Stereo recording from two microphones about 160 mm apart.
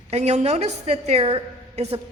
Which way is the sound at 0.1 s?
45° right (ahead or behind).